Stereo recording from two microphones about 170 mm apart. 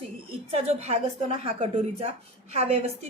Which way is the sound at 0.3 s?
35° right (ahead or behind).